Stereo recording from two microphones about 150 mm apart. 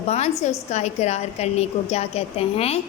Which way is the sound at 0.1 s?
45° left (ahead or behind).